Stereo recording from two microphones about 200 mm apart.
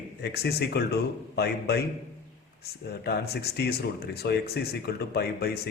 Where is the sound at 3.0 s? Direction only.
55° left (ahead or behind).